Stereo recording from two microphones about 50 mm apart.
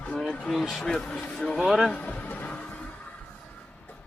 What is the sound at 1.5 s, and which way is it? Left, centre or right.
Speech, centre.